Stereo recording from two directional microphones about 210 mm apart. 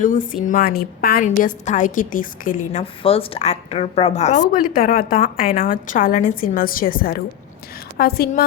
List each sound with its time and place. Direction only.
0.0 s a woman's voice: 40° left (ahead or behind)
2.8 s a woman's voice: 25° left (ahead or behind); by 8.4 s 45° left (ahead or behind)